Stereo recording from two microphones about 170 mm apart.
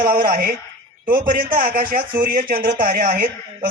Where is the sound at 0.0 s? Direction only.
55° right (ahead or behind).